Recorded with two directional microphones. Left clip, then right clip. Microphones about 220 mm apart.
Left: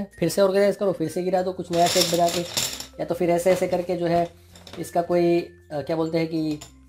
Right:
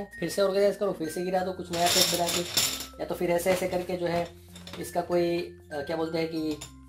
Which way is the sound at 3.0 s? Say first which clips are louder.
Left 6 dB; 45° left (ahead or behind).